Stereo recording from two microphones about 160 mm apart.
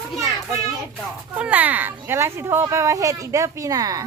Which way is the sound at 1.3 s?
10° right (ahead or behind).